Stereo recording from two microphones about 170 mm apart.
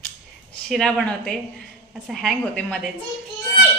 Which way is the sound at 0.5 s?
5° left (ahead or behind).